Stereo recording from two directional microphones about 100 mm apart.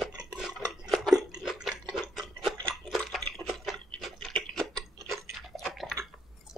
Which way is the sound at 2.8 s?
5° left (ahead or behind).